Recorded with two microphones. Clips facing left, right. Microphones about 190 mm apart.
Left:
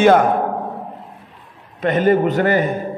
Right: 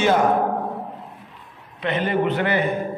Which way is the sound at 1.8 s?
45° left (ahead or behind).